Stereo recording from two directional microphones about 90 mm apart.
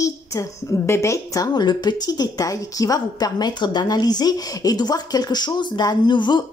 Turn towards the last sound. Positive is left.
turn(degrees=55)  # may be behind; listen again after turning